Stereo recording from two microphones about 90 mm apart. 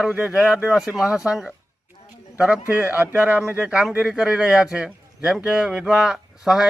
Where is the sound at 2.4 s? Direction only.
15° right (ahead or behind).